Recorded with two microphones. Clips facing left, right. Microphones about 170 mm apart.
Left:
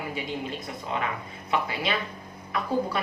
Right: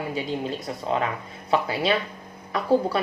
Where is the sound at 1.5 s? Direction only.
30° right (ahead or behind).